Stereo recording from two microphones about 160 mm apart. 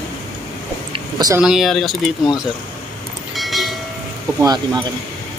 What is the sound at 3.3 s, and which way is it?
Train, centre (ahead or behind).